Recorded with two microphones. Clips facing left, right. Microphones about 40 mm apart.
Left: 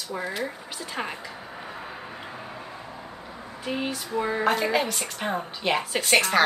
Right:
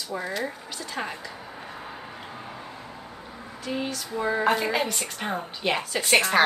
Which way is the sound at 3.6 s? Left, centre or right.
Centre.